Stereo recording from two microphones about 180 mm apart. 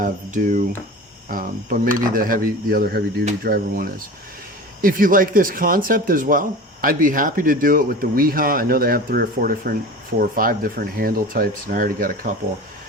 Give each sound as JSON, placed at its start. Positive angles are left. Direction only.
{"t": 0.0, "sound": "speech", "side_deg": -45}